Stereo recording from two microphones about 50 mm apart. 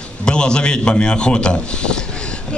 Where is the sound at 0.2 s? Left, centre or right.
Centre.